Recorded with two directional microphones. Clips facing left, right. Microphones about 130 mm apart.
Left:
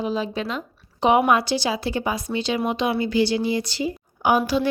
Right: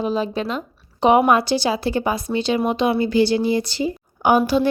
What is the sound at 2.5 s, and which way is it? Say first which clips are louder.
A woman's voice: right 4 dB; 40° right (ahead or behind).